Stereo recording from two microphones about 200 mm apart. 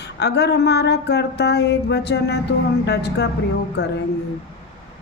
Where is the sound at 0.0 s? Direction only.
55° left (ahead or behind).